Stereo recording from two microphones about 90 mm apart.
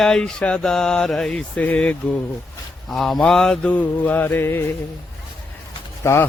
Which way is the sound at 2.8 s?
Centre (ahead or behind).